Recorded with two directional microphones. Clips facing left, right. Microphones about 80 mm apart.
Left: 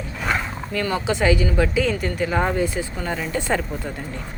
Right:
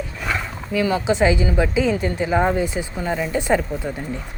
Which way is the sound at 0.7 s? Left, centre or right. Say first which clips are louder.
Right 4 dB; centre.